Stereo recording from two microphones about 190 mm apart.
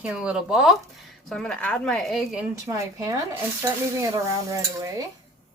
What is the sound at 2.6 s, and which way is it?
Speech, 15° right (ahead or behind).